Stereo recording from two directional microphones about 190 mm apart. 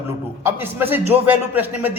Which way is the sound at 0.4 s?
10° right (ahead or behind).